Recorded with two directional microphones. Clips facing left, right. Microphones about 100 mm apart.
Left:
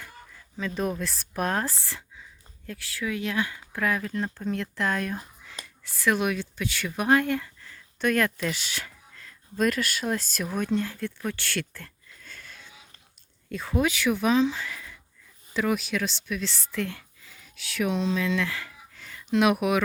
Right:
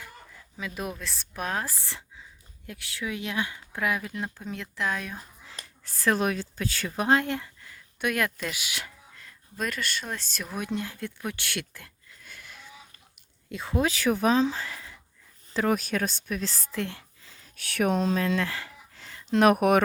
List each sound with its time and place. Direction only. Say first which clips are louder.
0.8 s speech: left 7 dB; centre (ahead or behind)
1.8 s a sound: left 1 dB; 20° right (ahead or behind)
2.6 s speech: left 3 dB; 20° right (ahead or behind); by 5.2 s centre (ahead or behind)
5.5 s speech: left 3 dB; 40° right (ahead or behind); by 10.6 s centre (ahead or behind)
10.6 s speech: left 4 dB; 15° right (ahead or behind)
13.8 s speech: right 1 dB; 35° right (ahead or behind)
16.8 s a sound: left 2 dB; 30° right (ahead or behind)
17.6 s speech: right 2 dB; 55° right (ahead or behind); by 19.4 s 25° right (ahead or behind)
19.4 s speech: right 3 dB; 45° right (ahead or behind)